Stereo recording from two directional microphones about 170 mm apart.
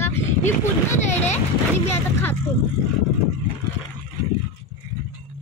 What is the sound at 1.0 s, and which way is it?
Speech, 40° left (ahead or behind).